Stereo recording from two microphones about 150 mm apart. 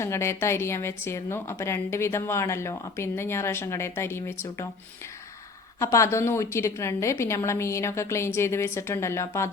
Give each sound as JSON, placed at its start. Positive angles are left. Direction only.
{"t": 0.0, "sound": "a woman's voice", "side_deg": 20}
{"t": 5.8, "sound": "a woman's voice", "side_deg": 20}